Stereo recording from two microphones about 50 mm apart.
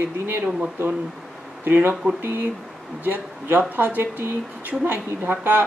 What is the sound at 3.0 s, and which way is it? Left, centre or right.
Speech, right.